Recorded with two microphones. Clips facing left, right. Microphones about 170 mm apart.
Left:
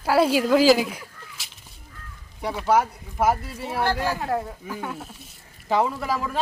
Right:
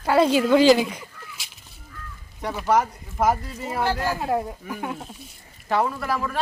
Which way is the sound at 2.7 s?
5° left (ahead or behind).